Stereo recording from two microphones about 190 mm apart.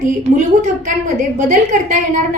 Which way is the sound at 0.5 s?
40° right (ahead or behind).